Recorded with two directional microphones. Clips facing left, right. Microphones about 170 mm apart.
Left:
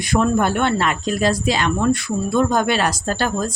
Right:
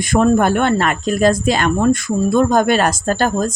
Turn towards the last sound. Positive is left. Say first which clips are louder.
# right 4 dB
turn(degrees=-45)  # may be behind; listen again after turning